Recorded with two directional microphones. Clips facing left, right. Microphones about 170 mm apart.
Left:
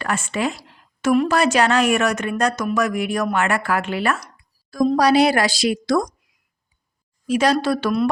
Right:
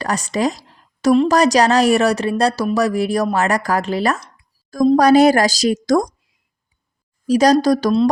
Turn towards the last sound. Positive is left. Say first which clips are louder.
# right 5 dB
turn(degrees=-40)  # may be behind; listen again after turning